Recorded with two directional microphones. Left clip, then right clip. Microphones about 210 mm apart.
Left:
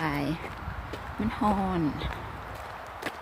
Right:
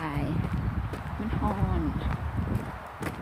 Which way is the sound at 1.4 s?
20° left (ahead or behind).